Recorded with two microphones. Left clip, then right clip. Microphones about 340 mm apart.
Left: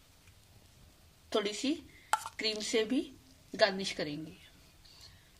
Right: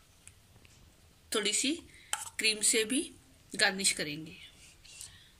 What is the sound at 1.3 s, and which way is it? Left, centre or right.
A woman's voice, centre.